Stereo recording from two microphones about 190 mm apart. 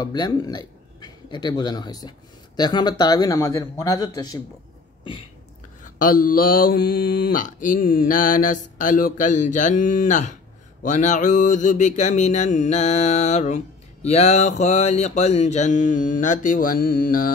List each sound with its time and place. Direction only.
0.0 s speech: 20° left (ahead or behind)
5.9 s speech: 45° left (ahead or behind)
10.8 s mantra: 40° left (ahead or behind)